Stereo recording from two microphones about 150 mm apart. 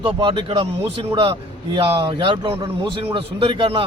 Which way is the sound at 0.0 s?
35° right (ahead or behind).